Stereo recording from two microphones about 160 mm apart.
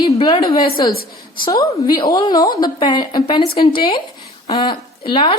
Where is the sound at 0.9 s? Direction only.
70° left (ahead or behind).